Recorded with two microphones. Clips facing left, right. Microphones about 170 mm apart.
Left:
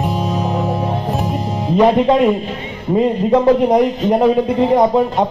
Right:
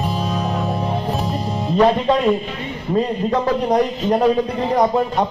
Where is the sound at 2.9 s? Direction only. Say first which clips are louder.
Left 5 dB; 20° left (ahead or behind).